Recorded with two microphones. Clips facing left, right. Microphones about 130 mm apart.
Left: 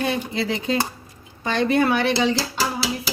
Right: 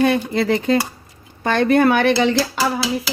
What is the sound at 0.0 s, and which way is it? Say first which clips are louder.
Cutlery: right 7 dB; 55° right (ahead or behind).